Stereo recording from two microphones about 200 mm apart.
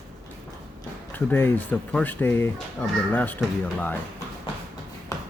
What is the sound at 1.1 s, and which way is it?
Speech, 10° left (ahead or behind).